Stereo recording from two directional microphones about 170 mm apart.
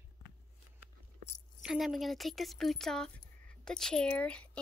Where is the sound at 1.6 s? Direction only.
Centre (ahead or behind).